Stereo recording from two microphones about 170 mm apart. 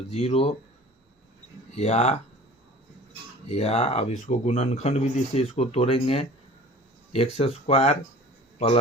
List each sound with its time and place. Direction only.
0.1 s speech: 35° left (ahead or behind)
1.7 s speech: 40° left (ahead or behind)
3.5 s a man's voice: 40° left (ahead or behind)